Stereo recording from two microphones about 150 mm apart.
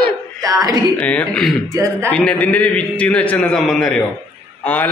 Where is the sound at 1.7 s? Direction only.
20° right (ahead or behind).